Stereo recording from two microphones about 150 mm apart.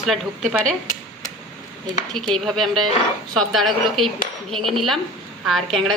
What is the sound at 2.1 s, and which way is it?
Cutlery, 5° left (ahead or behind).